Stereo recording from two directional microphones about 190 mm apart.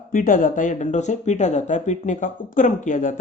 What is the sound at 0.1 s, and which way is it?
Speech, 45° left (ahead or behind).